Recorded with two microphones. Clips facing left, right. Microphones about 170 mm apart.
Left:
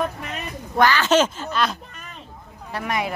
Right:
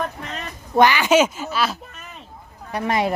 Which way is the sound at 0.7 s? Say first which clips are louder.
Right 2 dB; 15° right (ahead or behind).